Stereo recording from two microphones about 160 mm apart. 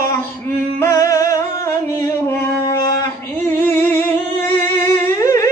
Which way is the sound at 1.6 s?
15° left (ahead or behind).